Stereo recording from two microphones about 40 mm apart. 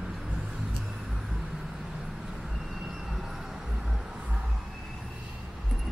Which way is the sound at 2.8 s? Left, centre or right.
Centre.